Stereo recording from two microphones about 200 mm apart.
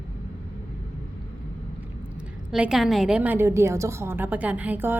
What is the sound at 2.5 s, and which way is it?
A woman's voice, centre (ahead or behind).